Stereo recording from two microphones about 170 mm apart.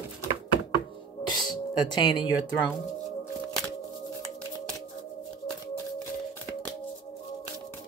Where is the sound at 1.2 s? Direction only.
25° left (ahead or behind).